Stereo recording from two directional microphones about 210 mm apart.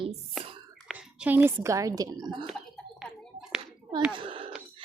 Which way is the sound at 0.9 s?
5° right (ahead or behind).